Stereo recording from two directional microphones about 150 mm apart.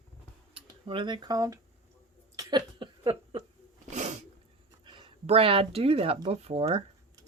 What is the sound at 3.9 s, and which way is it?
Sneeze, 50° right (ahead or behind).